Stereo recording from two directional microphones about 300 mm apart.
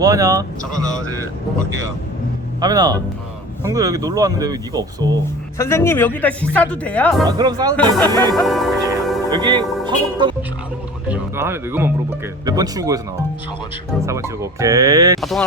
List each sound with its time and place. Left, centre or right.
0.0 s speech: centre
2.6 s speech: centre
5.5 s speech: centre
7.3 s speech: centre
7.8 s speech: centre
9.3 s speech: centre
14.0 s speech: centre
15.2 s speech: centre